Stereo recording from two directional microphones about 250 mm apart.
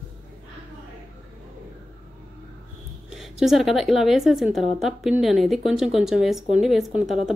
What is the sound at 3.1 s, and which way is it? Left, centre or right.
A woman's voice, centre.